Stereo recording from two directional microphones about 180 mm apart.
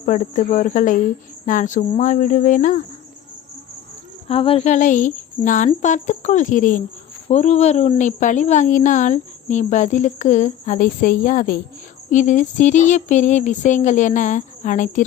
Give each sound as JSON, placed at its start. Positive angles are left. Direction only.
{"t": 0.0, "sound": "a woman's voice", "side_deg": 45}
{"t": 4.3, "sound": "a woman's voice", "side_deg": 35}